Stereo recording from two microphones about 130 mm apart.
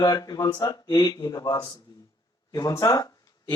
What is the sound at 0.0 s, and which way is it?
A man's voice, 30° left (ahead or behind).